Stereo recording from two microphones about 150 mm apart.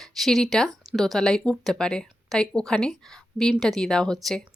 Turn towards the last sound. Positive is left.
turn(degrees=5)  # may be behind; listen again after turning